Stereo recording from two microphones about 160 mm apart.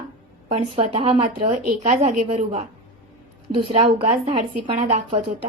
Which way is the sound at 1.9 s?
50° right (ahead or behind).